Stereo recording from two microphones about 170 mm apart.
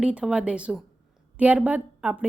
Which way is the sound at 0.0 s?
5° right (ahead or behind).